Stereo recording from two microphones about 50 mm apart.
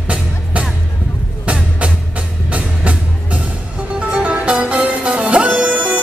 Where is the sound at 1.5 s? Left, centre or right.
Right.